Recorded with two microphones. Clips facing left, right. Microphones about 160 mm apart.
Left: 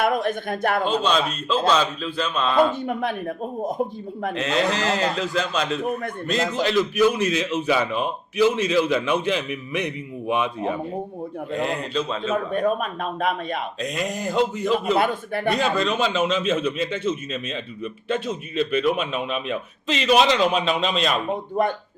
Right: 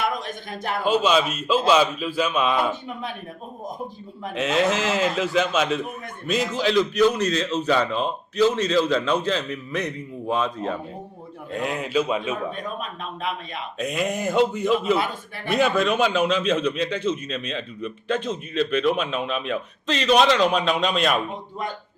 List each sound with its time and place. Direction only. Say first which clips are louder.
0.0 s a man's voice: left 6 dB; 55° left (ahead or behind)
0.9 s a man's voice: right 2 dB; 5° right (ahead or behind)
2.8 s a man's voice: left 7 dB; 55° left (ahead or behind)
4.4 s a man's voice: right 2 dB; centre (ahead or behind); by 10.8 s 15° left (ahead or behind)
11.6 s a man's voice: right 3 dB; 5° right (ahead or behind)
12.5 s a man's voice: left 9 dB; 50° left (ahead or behind)
13.7 s a man's voice: right 2 dB; 5° right (ahead or behind)
14.9 s a man's voice: left 5 dB; 60° left (ahead or behind)
15.5 s a man's voice: right 6 dB; centre (ahead or behind)